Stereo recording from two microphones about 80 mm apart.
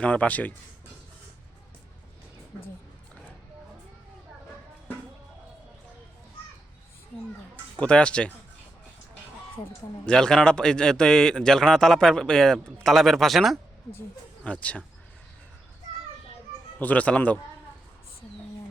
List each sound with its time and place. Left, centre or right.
0.0 s a man's voice: centre
7.5 s a sound: centre
10.1 s a man's voice: centre
14.4 s a man's voice: centre
16.7 s speech: centre